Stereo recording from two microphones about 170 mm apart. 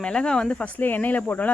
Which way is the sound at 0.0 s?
5° left (ahead or behind).